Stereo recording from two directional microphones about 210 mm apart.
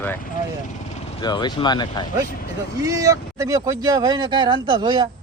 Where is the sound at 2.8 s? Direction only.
15° right (ahead or behind).